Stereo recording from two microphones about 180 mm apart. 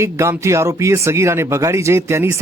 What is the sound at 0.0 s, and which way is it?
Speech, 15° right (ahead or behind).